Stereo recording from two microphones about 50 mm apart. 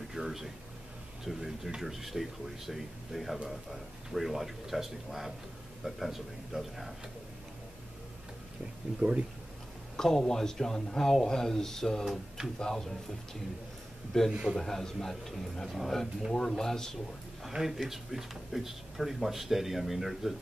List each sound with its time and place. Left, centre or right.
0.1 s air conditioning: centre
1.2 s speech: centre
8.9 s speech: right
9.9 s speech: centre
14.3 s a man's voice: centre
14.6 s speech: centre
17.5 s speech: centre